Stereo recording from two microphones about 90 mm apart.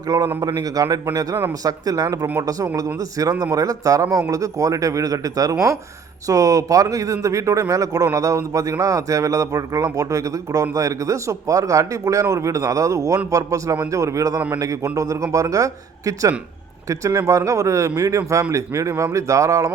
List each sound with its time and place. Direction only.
0.1 s a man's voice: 40° right (ahead or behind)